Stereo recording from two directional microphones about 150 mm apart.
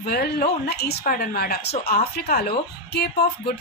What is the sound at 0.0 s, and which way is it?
A woman's voice, 85° left.